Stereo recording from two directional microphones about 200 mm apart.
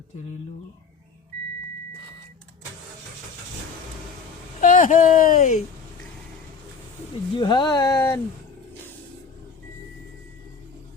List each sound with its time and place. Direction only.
4.6 s speech: 40° left (ahead or behind)
7.3 s speech: 20° left (ahead or behind)